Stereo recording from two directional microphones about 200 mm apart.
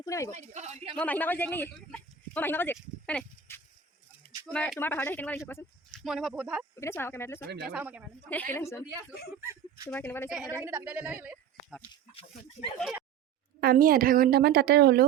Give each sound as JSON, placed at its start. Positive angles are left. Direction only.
{"t": 0.0, "sound": "a sound", "side_deg": 15}
{"t": 0.3, "sound": "speech", "side_deg": -35}
{"t": 0.9, "sound": "speech", "side_deg": 10}
{"t": 5.9, "sound": "speech", "side_deg": 0}
{"t": 6.7, "sound": "speech", "side_deg": 10}
{"t": 7.7, "sound": "speech", "side_deg": -10}
{"t": 8.3, "sound": "speech", "side_deg": 10}
{"t": 9.4, "sound": "a sound", "side_deg": -10}
{"t": 9.9, "sound": "speech", "side_deg": 10}
{"t": 10.2, "sound": "a woman's voice", "side_deg": -5}
{"t": 12.1, "sound": "speech", "side_deg": 35}
{"t": 13.6, "sound": "a woman's voice", "side_deg": -50}